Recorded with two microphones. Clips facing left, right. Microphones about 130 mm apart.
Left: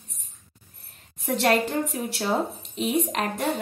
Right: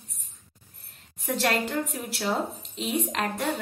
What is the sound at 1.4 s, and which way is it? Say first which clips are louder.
Speech: left 4 dB; 25° left (ahead or behind).